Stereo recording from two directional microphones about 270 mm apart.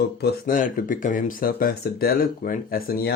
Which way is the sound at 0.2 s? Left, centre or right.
Left.